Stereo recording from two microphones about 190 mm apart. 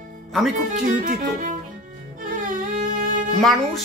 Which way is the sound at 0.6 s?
45° right (ahead or behind).